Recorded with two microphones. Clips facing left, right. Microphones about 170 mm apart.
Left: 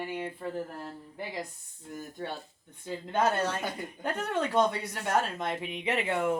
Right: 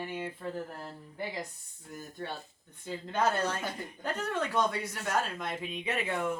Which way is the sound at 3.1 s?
20° left (ahead or behind).